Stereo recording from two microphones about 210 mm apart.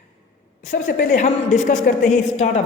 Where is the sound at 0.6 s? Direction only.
35° left (ahead or behind).